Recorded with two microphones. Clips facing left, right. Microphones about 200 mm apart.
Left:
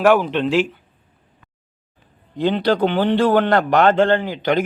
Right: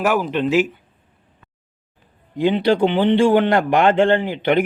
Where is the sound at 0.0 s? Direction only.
5° right (ahead or behind).